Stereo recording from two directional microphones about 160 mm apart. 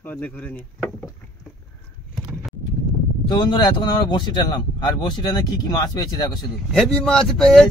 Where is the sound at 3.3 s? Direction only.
30° left (ahead or behind).